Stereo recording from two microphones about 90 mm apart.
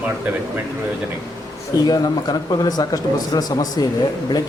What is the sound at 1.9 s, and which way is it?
A man's voice, 45° left (ahead or behind).